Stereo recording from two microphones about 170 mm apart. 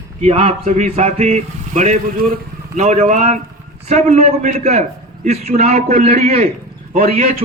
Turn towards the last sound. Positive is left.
turn(degrees=-35)  # may be behind; listen again after turning